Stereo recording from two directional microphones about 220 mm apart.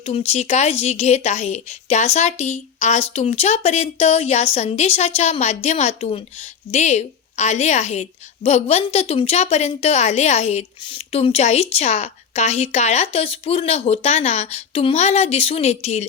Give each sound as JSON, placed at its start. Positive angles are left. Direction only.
{"t": 0.0, "sound": "a woman's voice", "side_deg": 25}